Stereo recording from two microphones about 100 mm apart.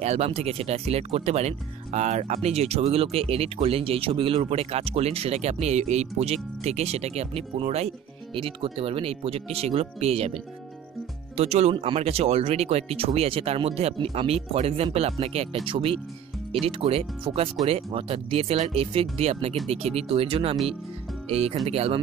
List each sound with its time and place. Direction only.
0.0 s speech: 90° right
8.4 s speech: 65° right (ahead or behind); by 15.6 s 90° right
15.6 s speech: 60° right (ahead or behind)
16.6 s speech: 75° right (ahead or behind)
21.3 s speech: 90° right